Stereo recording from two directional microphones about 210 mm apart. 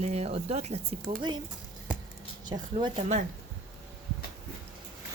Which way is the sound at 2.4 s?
20° right (ahead or behind).